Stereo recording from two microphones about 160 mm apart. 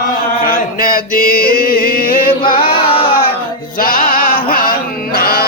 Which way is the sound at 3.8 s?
60° left (ahead or behind).